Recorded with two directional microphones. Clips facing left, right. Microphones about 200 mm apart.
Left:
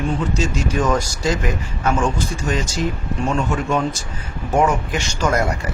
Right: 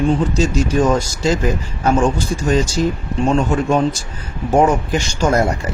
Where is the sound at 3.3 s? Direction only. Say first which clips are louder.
Right 5 dB; 30° right (ahead or behind).